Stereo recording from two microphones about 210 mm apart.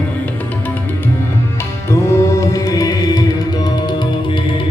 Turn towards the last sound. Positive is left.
turn(degrees=20)  # may be behind; listen again after turning